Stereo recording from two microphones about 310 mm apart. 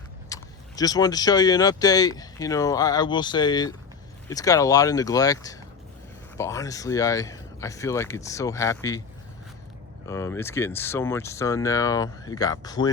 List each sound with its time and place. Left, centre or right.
0.3 s a sound: centre
0.8 s speech: centre
10.1 s speech: centre